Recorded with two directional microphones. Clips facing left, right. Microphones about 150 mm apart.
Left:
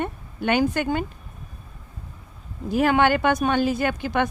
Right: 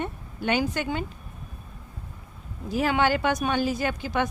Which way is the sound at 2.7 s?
55° left (ahead or behind).